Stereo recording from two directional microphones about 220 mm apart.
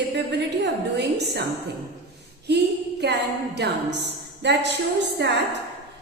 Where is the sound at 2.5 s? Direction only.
50° right (ahead or behind).